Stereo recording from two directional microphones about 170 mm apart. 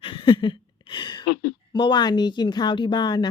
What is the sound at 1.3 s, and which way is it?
Speech, 90° left.